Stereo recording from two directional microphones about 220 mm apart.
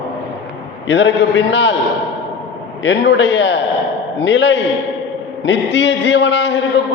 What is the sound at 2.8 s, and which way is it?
A man's voice, 55° left (ahead or behind).